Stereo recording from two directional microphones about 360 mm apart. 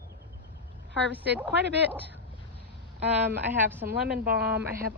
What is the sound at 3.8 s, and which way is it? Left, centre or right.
A woman's voice, right.